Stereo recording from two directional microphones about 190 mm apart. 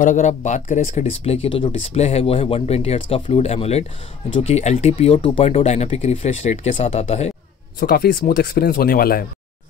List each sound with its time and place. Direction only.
0.0 s speech: 40° left (ahead or behind)
7.8 s speech: 55° left (ahead or behind)